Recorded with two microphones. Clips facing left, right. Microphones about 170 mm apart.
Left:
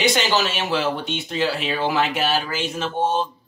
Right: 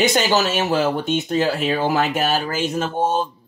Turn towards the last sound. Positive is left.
turn(degrees=-45)  # may be behind; listen again after turning